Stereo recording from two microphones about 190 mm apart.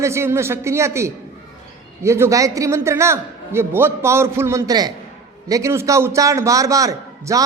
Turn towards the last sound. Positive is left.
turn(degrees=-15)  # may be behind; listen again after turning